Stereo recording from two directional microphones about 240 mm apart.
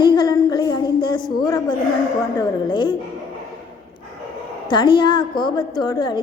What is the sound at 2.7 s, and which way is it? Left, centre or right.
Speech, centre.